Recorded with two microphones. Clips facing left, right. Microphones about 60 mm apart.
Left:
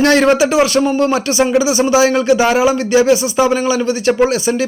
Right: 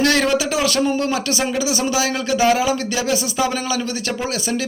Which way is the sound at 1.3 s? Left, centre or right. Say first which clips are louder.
Left 8 dB; centre.